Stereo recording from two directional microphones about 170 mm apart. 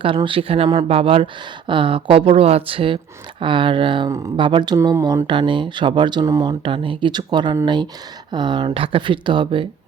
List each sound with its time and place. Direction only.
0.0 s speech: 30° right (ahead or behind)